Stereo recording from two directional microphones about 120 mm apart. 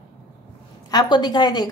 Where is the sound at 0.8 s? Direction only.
35° left (ahead or behind).